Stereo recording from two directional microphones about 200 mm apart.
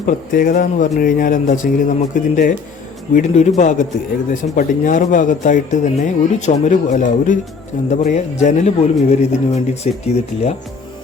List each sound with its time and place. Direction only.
0.3 s speech: 45° left (ahead or behind)